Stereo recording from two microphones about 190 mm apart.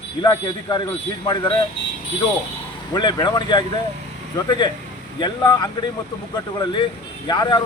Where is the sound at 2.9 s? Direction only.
20° left (ahead or behind).